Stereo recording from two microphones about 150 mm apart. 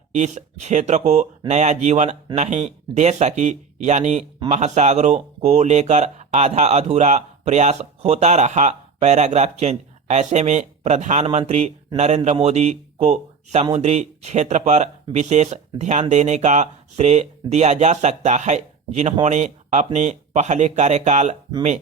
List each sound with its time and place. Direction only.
0.2 s speech: 55° right (ahead or behind)